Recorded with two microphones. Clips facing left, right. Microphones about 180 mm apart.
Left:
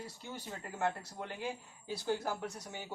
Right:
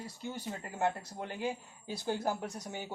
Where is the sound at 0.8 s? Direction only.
20° right (ahead or behind).